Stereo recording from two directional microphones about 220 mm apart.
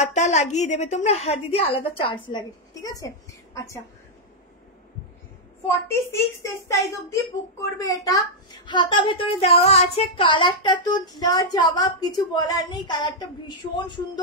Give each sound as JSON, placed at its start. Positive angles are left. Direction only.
{"t": 0.0, "sound": "a woman's voice", "side_deg": 35}
{"t": 5.7, "sound": "a woman's voice", "side_deg": 10}